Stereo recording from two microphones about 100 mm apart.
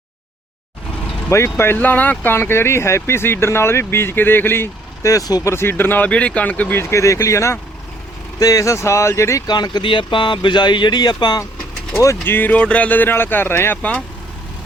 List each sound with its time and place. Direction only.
1.5 s speech: 20° left (ahead or behind)
5.1 s speech: 40° left (ahead or behind)
5.5 s speech: 25° left (ahead or behind)
6.9 s speech: 30° left (ahead or behind)
9.5 s speech: 45° left (ahead or behind)
11.9 s speech: 25° left (ahead or behind)